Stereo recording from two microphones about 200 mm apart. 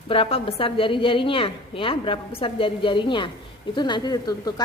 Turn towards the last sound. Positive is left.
turn(degrees=20)  # may be behind; listen again after turning